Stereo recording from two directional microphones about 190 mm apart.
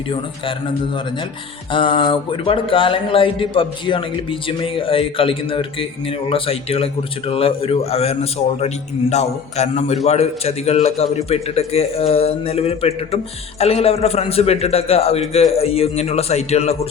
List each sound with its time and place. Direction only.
1.7 s a man's voice: 25° left (ahead or behind)